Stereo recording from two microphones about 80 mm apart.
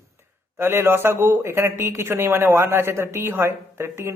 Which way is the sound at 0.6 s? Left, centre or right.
Right.